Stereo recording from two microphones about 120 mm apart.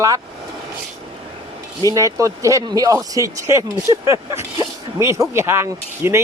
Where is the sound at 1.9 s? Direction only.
25° right (ahead or behind).